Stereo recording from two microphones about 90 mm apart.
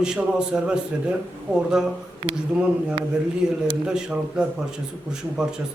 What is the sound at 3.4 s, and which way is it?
Speech, 10° right (ahead or behind).